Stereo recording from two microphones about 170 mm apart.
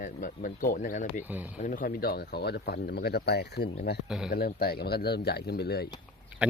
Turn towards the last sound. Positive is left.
turn(degrees=70)  # may be behind; listen again after turning